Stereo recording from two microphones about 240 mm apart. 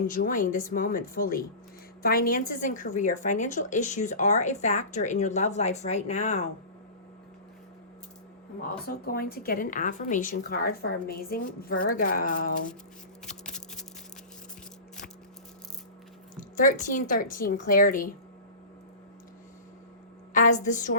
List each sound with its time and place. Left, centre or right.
0.1 s a woman's voice: left
8.7 s a woman's voice: left
13.4 s a sound: centre
16.4 s a woman's voice: left
20.3 s a woman's voice: left